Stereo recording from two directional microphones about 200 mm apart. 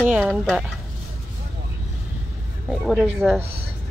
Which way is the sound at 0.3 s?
Centre (ahead or behind).